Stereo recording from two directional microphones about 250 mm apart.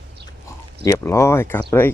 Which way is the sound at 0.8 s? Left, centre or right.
Centre.